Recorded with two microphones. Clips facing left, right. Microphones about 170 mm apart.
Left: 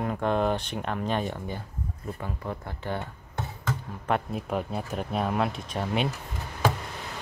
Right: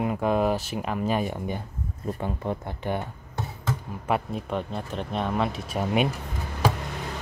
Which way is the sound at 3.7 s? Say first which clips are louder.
Right 1 dB; 5° right (ahead or behind).